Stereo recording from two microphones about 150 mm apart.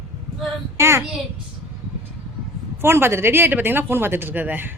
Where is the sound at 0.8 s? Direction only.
15° right (ahead or behind).